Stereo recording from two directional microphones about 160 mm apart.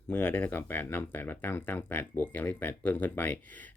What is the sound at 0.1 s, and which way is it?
Speech, 10° left (ahead or behind).